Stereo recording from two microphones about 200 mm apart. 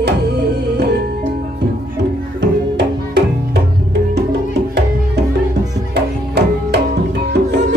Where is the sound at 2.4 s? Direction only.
55° right (ahead or behind).